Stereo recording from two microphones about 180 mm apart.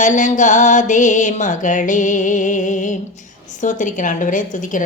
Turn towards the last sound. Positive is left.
turn(degrees=45)  # may be behind; listen again after turning